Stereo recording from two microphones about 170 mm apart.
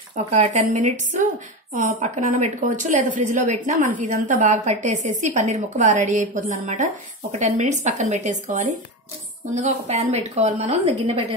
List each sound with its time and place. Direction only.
0.1 s a woman's voice: 45° right (ahead or behind)